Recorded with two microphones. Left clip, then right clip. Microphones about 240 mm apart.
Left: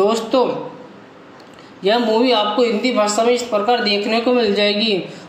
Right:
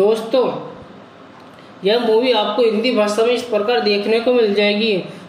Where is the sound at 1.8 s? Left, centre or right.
Centre.